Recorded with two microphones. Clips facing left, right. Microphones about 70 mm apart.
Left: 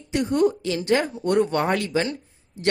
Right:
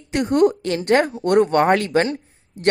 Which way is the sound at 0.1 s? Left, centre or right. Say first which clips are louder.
Right 4 dB; right.